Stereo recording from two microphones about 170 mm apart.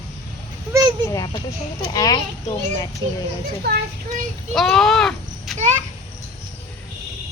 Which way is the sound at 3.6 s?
70° right (ahead or behind).